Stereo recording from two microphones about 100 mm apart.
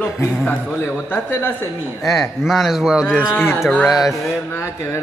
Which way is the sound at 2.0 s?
Centre (ahead or behind).